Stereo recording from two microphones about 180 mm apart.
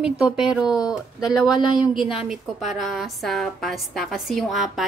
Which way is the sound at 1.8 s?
Centre (ahead or behind).